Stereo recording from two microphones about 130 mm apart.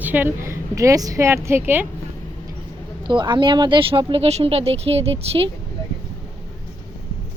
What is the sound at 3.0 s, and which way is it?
Speech, 35° right (ahead or behind).